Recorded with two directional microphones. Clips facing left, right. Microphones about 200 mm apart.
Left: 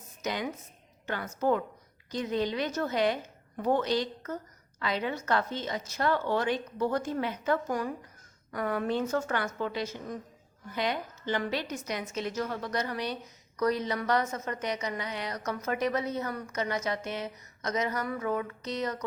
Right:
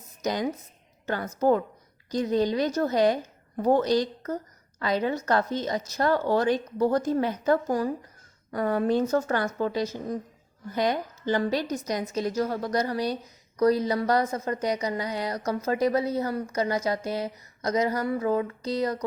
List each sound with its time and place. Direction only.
0.2 s a woman's voice: 40° right (ahead or behind)